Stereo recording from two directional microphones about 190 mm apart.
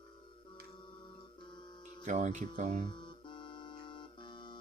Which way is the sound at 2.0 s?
40° right (ahead or behind).